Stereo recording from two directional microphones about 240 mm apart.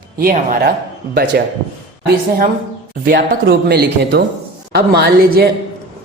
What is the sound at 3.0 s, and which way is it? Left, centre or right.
A woman's voice, right.